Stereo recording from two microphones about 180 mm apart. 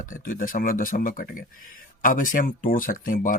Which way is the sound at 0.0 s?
50° left (ahead or behind).